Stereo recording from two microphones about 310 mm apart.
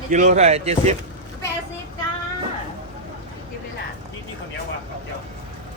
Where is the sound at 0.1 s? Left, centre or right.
Right.